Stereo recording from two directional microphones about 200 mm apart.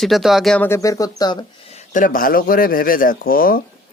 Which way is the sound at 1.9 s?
45° left (ahead or behind).